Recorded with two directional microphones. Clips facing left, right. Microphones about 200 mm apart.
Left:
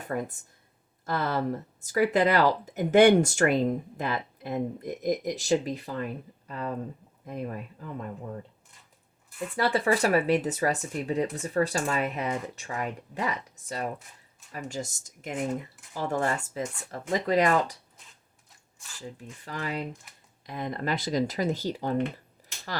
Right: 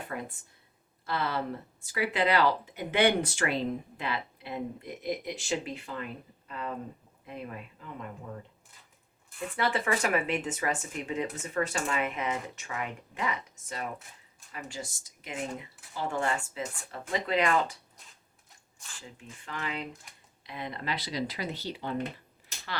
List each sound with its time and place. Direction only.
0.0 s speech: 45° left (ahead or behind)
9.6 s speech: 35° left (ahead or behind)
19.0 s speech: 35° left (ahead or behind)
20.1 s computer keyboard: 5° left (ahead or behind)
20.4 s speech: 45° left (ahead or behind)